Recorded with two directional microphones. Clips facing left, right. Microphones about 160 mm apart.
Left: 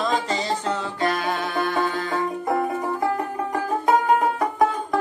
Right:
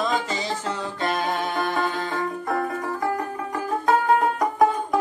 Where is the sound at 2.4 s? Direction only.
20° left (ahead or behind).